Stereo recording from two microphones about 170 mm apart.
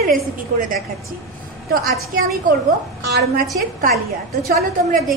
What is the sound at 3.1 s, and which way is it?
Speech, 60° right (ahead or behind).